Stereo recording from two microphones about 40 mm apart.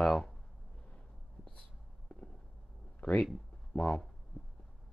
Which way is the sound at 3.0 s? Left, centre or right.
Left.